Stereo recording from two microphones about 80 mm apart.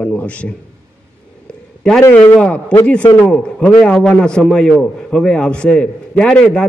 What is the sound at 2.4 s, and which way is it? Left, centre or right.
A man's voice, centre.